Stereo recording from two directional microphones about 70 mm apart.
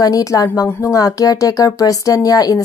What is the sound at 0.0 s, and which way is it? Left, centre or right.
Speech, left.